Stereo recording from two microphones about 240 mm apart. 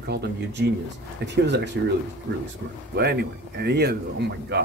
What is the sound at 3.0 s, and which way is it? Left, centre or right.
Speech, right.